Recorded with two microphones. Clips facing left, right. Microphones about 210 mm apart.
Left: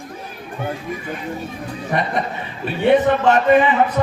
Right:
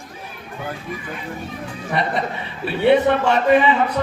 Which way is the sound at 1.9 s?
45° left (ahead or behind).